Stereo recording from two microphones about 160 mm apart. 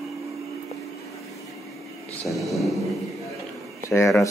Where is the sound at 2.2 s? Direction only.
Centre (ahead or behind).